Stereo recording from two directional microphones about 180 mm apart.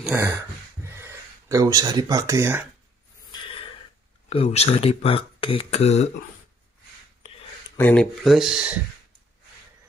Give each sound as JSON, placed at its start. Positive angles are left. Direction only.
{"t": 0.0, "sound": "a sound", "side_deg": -10}
{"t": 0.8, "sound": "speech", "side_deg": -15}
{"t": 3.3, "sound": "snort", "side_deg": 25}
{"t": 4.3, "sound": "speech", "side_deg": 35}
{"t": 7.7, "sound": "speech", "side_deg": 10}